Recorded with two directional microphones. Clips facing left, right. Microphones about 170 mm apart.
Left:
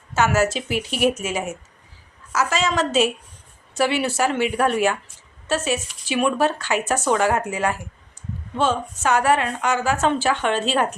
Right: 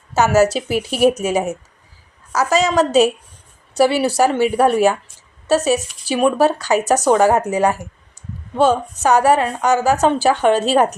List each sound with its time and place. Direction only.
0.3 s speech: 40° right (ahead or behind)